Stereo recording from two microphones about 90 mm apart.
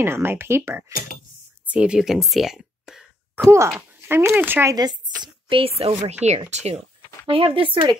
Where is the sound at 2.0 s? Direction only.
Centre (ahead or behind).